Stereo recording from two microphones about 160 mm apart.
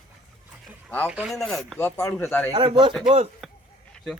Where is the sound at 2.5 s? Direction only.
30° right (ahead or behind).